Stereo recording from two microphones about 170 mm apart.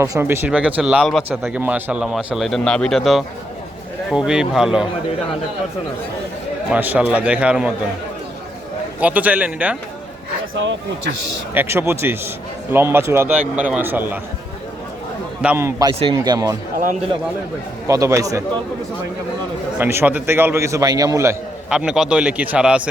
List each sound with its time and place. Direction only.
0.0 s a man's voice: 15° right (ahead or behind)
6.7 s a man's voice: 10° right (ahead or behind)
9.0 s a man's voice: 10° right (ahead or behind)
11.5 s a man's voice: 15° right (ahead or behind)
15.4 s a man's voice: 10° right (ahead or behind)
16.7 s speech: 50° right (ahead or behind)
17.8 s a man's voice: 20° right (ahead or behind)
19.8 s a man's voice: 10° right (ahead or behind)
21.7 s a man's voice: 5° right (ahead or behind)